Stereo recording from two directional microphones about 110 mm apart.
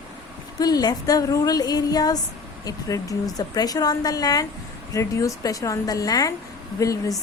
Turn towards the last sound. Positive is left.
turn(degrees=30)  # may be behind; listen again after turning